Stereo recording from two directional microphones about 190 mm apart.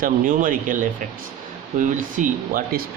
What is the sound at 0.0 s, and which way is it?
Speech, 45° right (ahead or behind).